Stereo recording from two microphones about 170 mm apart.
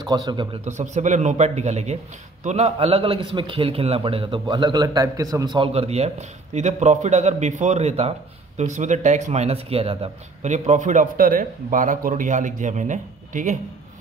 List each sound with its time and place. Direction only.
0.0 s a man's voice: 25° right (ahead or behind)
0.7 s a man's voice: 45° right (ahead or behind); by 5.7 s 25° right (ahead or behind)
5.7 s a man's voice: 40° right (ahead or behind)